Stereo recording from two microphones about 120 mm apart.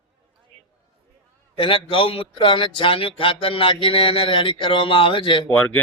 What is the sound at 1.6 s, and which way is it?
Speech, 45° left (ahead or behind).